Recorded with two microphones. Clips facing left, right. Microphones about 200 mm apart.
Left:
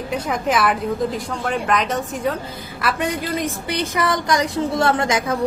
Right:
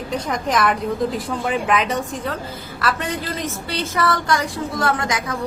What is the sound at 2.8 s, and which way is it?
A woman's voice, 15° left (ahead or behind).